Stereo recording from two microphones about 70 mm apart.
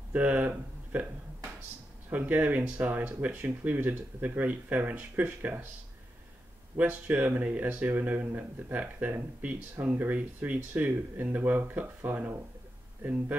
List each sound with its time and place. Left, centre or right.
0.1 s speech: right
2.0 s speech: right
6.8 s speech: right